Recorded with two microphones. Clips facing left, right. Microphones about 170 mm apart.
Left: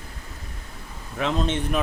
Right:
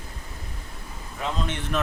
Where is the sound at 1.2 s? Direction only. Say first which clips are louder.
Left 5 dB; 65° left (ahead or behind).